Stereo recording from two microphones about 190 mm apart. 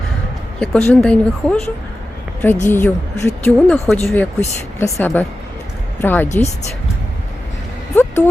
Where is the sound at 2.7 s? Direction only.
10° left (ahead or behind).